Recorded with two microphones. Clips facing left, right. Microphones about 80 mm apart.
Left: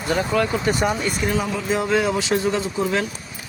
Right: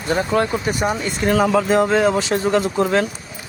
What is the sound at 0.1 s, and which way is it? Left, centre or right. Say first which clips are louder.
Speech: right 2 dB; right.